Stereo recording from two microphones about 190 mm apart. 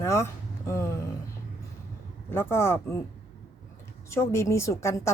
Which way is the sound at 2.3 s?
15° left (ahead or behind).